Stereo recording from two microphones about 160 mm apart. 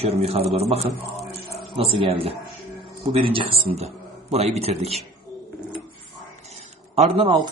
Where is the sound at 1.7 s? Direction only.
35° right (ahead or behind).